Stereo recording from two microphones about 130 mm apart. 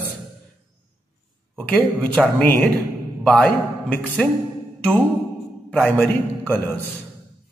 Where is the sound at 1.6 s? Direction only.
10° left (ahead or behind).